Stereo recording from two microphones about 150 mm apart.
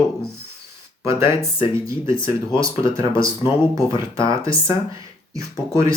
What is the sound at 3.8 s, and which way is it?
Speech, 35° left (ahead or behind).